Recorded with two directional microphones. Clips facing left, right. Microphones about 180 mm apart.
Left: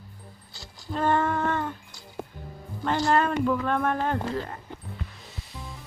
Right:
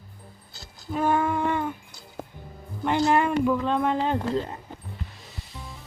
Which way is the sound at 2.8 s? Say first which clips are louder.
Right 2 dB; 15° right (ahead or behind).